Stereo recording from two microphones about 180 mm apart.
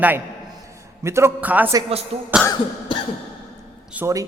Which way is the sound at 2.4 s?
25° left (ahead or behind).